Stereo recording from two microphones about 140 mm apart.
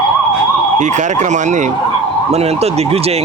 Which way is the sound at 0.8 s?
60° right (ahead or behind).